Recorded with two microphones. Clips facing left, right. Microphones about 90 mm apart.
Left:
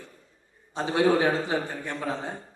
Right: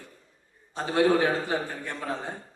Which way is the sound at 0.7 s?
20° left (ahead or behind).